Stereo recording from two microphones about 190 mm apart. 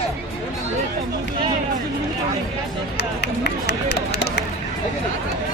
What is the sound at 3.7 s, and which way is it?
Run, 60° left (ahead or behind).